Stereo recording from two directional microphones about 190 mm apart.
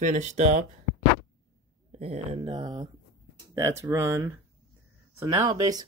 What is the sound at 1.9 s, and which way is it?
Speech, 35° right (ahead or behind).